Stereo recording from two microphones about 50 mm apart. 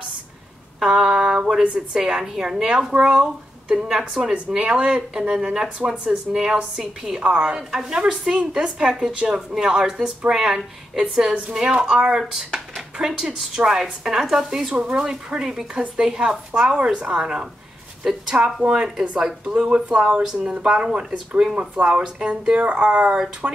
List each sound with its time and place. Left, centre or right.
0.7 s a sound: centre
2.4 s a woman's voice: centre
7.2 s a woman's voice: right
19.5 s a woman's voice: right
23.1 s a woman's voice: centre